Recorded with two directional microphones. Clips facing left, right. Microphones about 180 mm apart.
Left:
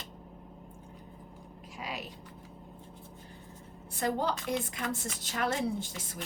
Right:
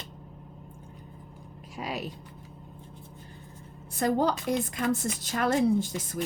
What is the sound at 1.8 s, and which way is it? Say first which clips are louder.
Speech: right 6 dB; 50° right (ahead or behind).